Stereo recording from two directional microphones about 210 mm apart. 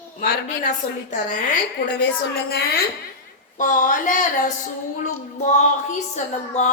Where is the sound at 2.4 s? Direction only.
45° left (ahead or behind).